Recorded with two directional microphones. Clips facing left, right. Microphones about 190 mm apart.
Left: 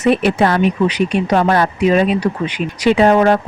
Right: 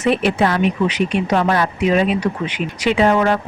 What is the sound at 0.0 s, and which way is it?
Speech, 45° left (ahead or behind).